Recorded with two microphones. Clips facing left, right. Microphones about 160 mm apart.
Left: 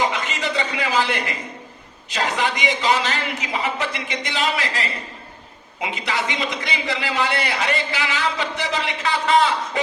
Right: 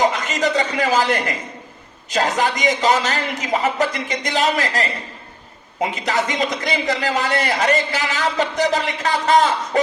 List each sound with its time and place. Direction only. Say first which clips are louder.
0.0 s a man's voice: right 5 dB; 40° right (ahead or behind)